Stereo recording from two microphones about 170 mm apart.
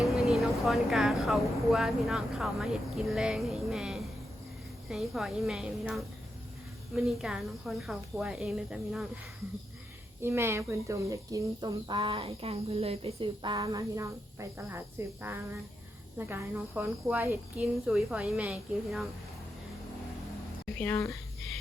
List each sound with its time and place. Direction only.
0.0 s speech: centre (ahead or behind)
10.2 s speech: 15° right (ahead or behind)
20.7 s speech: 10° left (ahead or behind)